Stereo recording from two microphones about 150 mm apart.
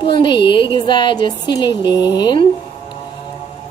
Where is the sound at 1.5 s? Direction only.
30° left (ahead or behind).